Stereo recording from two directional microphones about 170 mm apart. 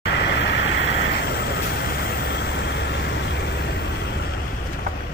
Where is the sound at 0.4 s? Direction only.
90° left.